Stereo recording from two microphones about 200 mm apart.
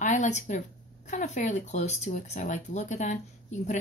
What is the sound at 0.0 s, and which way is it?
Speech, 40° left (ahead or behind).